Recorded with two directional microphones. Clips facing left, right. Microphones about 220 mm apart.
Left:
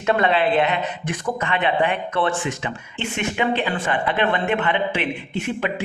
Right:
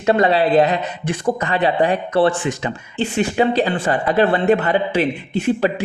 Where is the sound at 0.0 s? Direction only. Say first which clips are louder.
Right 4 dB; 35° right (ahead or behind).